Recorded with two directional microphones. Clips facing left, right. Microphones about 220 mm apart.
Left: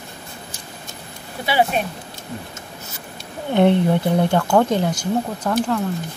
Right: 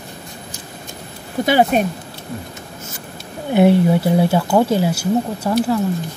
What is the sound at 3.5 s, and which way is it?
Speech, 10° right (ahead or behind).